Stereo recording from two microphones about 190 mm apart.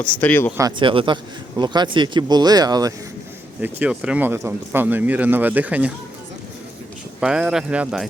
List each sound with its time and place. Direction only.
0.0 s speech: 10° left (ahead or behind)
0.8 s speech: 25° right (ahead or behind)
3.6 s speech: 5° right (ahead or behind)
7.2 s speech: 5° right (ahead or behind)